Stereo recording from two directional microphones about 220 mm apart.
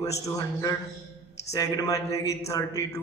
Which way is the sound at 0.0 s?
15° left (ahead or behind).